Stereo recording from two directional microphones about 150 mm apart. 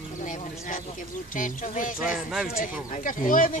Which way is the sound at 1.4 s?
60° left (ahead or behind).